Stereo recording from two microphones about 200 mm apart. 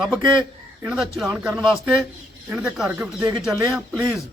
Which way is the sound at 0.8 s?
5° right (ahead or behind).